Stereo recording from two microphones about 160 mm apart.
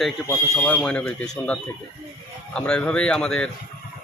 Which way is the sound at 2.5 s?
5° left (ahead or behind).